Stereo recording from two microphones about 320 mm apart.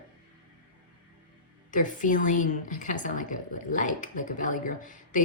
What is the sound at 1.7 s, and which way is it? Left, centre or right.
A woman's voice, left.